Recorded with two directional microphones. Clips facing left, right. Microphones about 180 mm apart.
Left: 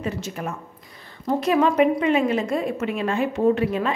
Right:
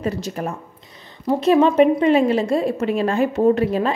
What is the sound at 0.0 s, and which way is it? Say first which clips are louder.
A woman's voice: right 4 dB; 40° right (ahead or behind).